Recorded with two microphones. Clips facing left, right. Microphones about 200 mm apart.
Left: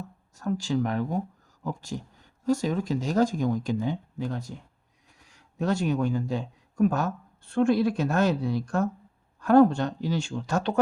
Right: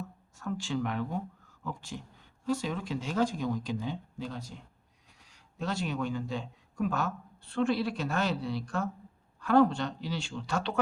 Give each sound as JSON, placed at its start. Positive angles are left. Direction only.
{"t": 0.3, "sound": "speech", "side_deg": 40}
{"t": 5.5, "sound": "speech", "side_deg": 50}